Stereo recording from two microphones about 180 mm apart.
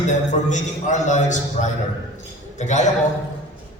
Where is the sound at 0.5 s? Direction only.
40° left (ahead or behind).